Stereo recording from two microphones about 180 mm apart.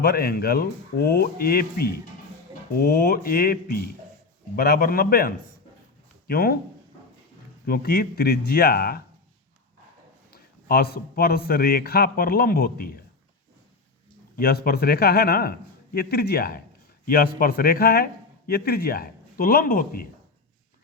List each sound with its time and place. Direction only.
0.0 s a man's voice: 60° left (ahead or behind)
7.7 s a man's voice: 60° left (ahead or behind)
10.3 s a man's voice: 60° left (ahead or behind)
14.3 s a man's voice: 55° left (ahead or behind)